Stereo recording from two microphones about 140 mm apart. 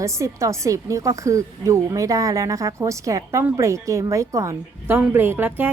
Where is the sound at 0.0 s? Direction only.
20° right (ahead or behind).